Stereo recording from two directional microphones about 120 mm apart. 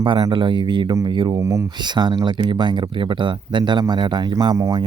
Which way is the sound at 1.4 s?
25° right (ahead or behind).